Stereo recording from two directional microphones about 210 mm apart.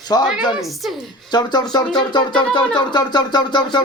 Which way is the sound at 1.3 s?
20° left (ahead or behind).